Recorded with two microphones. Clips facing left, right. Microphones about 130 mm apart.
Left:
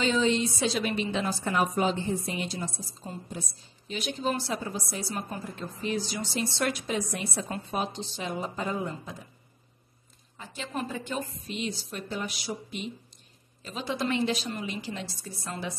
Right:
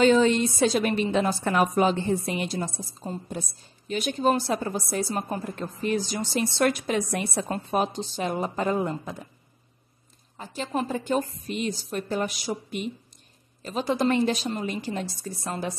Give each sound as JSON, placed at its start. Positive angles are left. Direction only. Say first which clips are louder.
{"t": 0.0, "sound": "a woman's voice", "louder": "right 6 dB", "side_deg": -50}
{"t": 7.4, "sound": "a woman's voice", "louder": "right 6 dB", "side_deg": -45}
{"t": 10.3, "sound": "a woman's voice", "louder": "right 6 dB", "side_deg": -40}